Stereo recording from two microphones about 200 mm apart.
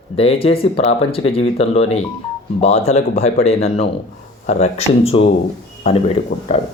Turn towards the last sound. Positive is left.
turn(degrees=30)  # may be behind; listen again after turning